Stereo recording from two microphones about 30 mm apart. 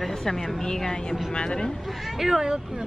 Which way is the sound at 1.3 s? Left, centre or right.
Left.